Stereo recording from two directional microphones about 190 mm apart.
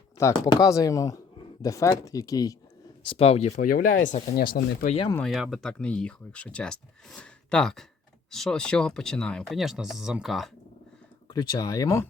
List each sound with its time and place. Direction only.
0.2 s speech: 15° left (ahead or behind)
3.0 s speech: 30° left (ahead or behind)
3.5 s speech: 45° left (ahead or behind)
5.1 s speech: centre (ahead or behind)
11.3 s speech: 20° left (ahead or behind)